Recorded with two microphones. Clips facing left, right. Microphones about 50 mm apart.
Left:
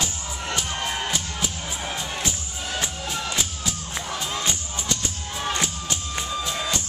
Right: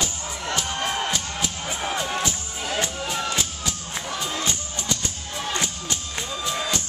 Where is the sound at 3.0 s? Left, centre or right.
Centre.